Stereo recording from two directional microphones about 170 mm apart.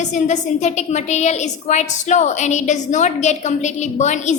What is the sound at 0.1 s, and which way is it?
A woman's voice, 45° left (ahead or behind).